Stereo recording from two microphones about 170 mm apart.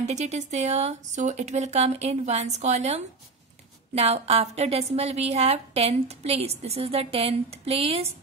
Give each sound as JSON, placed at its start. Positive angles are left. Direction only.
{"t": 0.0, "sound": "a woman's voice", "side_deg": -40}